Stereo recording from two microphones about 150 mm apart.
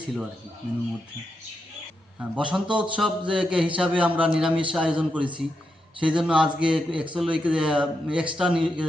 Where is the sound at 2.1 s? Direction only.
5° right (ahead or behind).